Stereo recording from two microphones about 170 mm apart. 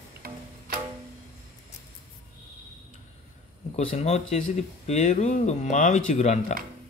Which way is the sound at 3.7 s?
40° left (ahead or behind).